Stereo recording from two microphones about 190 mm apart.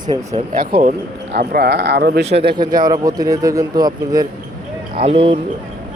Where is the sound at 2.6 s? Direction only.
20° right (ahead or behind).